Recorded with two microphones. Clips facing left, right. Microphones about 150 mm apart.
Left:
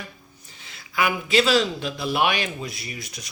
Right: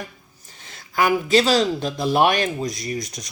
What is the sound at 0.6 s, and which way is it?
Speech, 45° right (ahead or behind).